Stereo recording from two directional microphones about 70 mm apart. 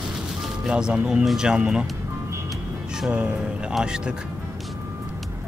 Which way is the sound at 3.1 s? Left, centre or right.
Centre.